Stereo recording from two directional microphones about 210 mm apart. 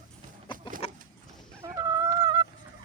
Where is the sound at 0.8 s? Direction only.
30° left (ahead or behind).